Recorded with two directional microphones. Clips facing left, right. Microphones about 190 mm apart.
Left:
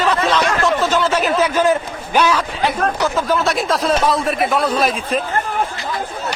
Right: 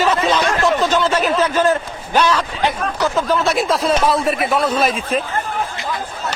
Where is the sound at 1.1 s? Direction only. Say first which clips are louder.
Even; 10° left (ahead or behind).